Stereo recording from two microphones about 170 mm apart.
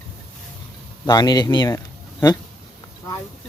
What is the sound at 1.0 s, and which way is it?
Speech, 25° left (ahead or behind).